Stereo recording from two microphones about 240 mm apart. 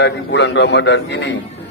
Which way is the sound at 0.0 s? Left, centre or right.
Left.